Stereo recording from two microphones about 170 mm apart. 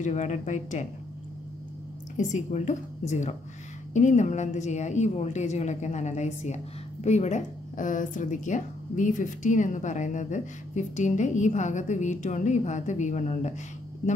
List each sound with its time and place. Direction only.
0.0 s a woman's voice: 45° left (ahead or behind)
2.1 s a woman's voice: 45° left (ahead or behind)